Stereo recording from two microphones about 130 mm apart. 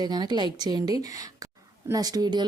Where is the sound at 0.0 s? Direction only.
30° right (ahead or behind).